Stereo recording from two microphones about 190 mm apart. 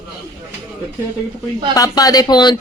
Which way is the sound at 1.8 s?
20° left (ahead or behind).